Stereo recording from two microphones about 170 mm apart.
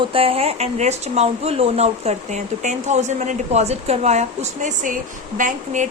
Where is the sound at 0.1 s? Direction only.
35° right (ahead or behind).